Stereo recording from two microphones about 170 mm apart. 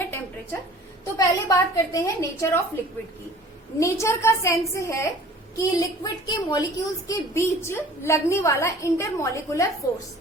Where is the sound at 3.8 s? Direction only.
15° left (ahead or behind).